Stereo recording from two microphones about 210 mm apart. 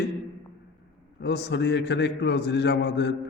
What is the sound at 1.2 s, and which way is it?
A man's voice, 55° left (ahead or behind).